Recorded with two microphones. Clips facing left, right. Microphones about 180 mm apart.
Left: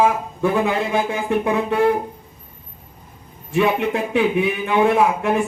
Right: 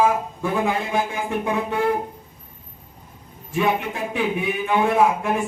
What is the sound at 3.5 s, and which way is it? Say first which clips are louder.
A man's voice: left 4 dB; 65° left (ahead or behind).